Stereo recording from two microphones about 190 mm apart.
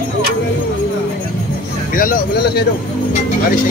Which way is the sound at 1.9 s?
45° left (ahead or behind).